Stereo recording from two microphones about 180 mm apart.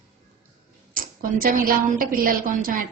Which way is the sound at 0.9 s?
50° right (ahead or behind).